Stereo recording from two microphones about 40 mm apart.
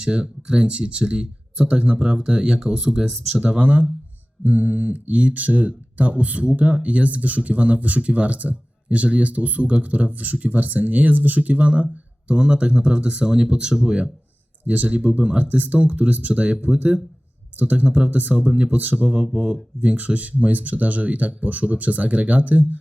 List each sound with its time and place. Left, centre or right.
0.0 s speech: right
3.6 s speech: right
19.0 s speech: right
20.0 s speech: right